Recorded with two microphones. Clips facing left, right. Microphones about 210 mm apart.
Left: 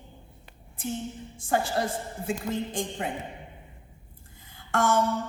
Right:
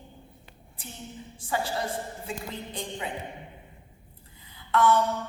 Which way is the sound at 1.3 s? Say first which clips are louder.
Left 4 dB; 50° left (ahead or behind).